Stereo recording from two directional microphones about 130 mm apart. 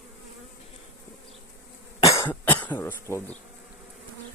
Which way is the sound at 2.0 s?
25° left (ahead or behind).